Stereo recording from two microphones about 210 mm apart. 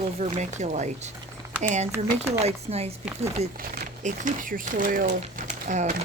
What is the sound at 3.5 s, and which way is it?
Speech, 45° right (ahead or behind).